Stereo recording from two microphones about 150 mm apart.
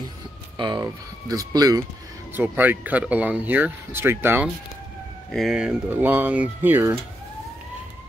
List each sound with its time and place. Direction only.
0.6 s speech: 30° right (ahead or behind)
2.3 s speech: 10° right (ahead or behind)
5.3 s speech: centre (ahead or behind)